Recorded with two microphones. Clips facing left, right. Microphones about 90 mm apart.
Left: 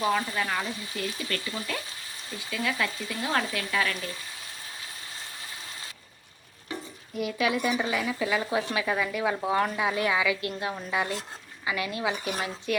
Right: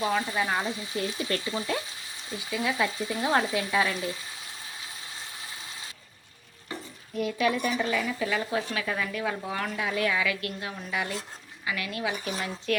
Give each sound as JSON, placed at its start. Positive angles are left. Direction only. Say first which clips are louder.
{"t": 0.2, "sound": "speech", "louder": "right 2 dB", "side_deg": -20}
{"t": 7.1, "sound": "a woman's voice", "louder": "right 1 dB", "side_deg": 5}